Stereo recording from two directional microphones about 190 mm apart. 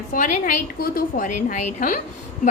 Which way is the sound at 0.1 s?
45° left (ahead or behind).